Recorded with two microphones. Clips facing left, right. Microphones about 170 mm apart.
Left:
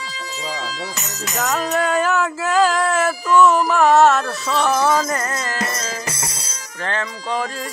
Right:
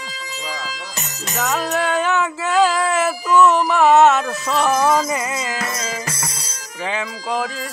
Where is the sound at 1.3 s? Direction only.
Centre (ahead or behind).